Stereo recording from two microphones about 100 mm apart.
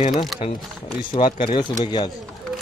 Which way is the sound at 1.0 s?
60° left (ahead or behind).